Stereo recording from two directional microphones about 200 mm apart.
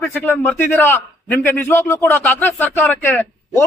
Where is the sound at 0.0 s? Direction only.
10° left (ahead or behind).